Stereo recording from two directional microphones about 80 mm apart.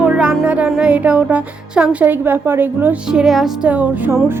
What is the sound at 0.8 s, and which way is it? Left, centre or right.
Speech, centre.